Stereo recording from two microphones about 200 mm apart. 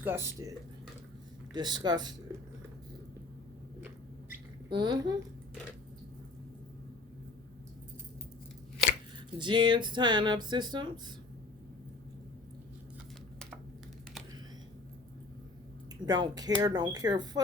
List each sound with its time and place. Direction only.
0.0 s speech: 10° right (ahead or behind)
1.5 s speech: 20° right (ahead or behind)
4.7 s speech: 20° right (ahead or behind)
9.4 s speech: 25° right (ahead or behind)
16.0 s speech: 20° right (ahead or behind)